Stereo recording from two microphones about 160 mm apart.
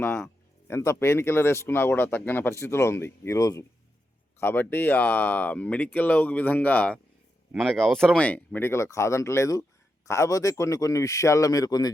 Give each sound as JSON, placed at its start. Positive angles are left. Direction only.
{"t": 0.7, "sound": "a man's voice", "side_deg": 15}